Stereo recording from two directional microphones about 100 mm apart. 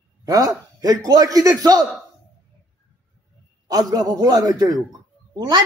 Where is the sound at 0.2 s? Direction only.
35° right (ahead or behind).